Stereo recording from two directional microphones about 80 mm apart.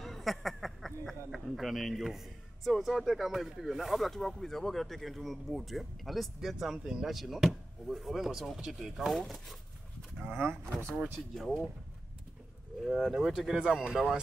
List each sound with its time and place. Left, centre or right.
0.0 s speech: centre
10.1 s speech: right
11.1 s speech: centre
12.8 s speech: centre